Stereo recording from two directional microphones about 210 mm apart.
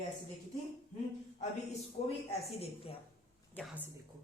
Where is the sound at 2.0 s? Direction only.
35° left (ahead or behind).